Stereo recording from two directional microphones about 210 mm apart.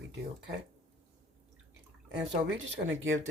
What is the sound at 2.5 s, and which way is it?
Speech, 65° right (ahead or behind).